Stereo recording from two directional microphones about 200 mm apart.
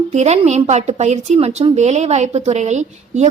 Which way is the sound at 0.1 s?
35° right (ahead or behind).